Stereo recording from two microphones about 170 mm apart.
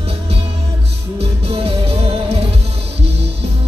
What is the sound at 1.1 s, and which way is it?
Music, 35° right (ahead or behind).